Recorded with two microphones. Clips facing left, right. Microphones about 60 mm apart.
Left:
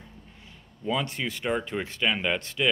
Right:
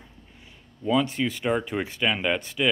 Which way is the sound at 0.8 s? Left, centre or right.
Centre.